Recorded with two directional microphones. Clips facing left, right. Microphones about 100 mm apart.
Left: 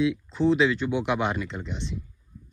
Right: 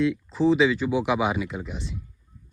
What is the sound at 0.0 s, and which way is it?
Speech, centre (ahead or behind).